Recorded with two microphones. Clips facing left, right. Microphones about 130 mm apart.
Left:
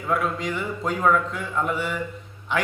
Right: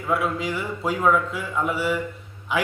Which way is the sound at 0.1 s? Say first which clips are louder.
Right 1 dB; 5° right (ahead or behind).